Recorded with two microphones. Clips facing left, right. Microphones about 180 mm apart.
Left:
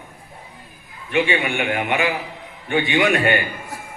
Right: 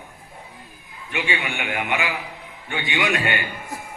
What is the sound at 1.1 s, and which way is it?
A man's voice, 40° left (ahead or behind).